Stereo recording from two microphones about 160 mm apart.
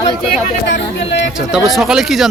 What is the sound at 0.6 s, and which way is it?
Speech, 90° left.